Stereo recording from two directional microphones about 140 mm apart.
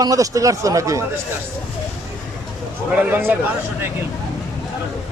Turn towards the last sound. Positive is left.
turn(degrees=-15)  # may be behind; listen again after turning